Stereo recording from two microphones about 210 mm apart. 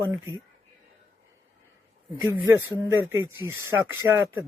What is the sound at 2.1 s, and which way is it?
Speech, 15° right (ahead or behind).